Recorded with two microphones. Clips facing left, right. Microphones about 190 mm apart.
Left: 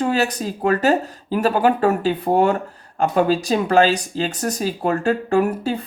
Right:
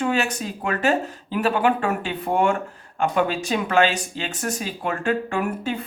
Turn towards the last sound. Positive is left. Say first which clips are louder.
# left 6 dB
turn(degrees=35)  # may be behind; listen again after turning